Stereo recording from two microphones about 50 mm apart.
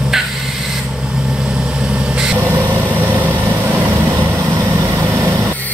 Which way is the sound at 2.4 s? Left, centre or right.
Right.